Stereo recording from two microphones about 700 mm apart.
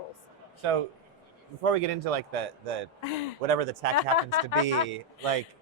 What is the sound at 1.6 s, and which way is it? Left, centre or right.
Speech, right.